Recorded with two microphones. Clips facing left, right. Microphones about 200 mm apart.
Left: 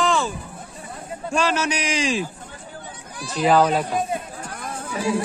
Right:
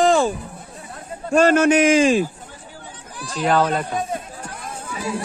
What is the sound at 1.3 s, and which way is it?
Speech, 50° right (ahead or behind).